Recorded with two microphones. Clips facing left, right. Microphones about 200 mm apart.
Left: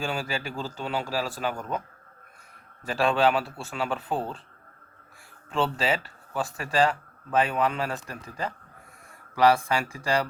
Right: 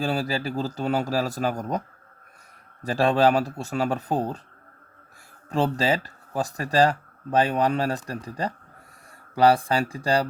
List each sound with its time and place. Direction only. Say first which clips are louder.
0.0 s speech: right 5 dB; 35° right (ahead or behind)
2.8 s speech: right 3 dB; 35° right (ahead or behind)
5.5 s speech: right 3 dB; 40° right (ahead or behind)